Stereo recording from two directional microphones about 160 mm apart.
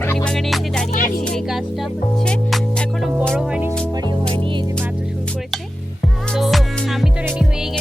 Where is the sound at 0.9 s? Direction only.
60° left (ahead or behind).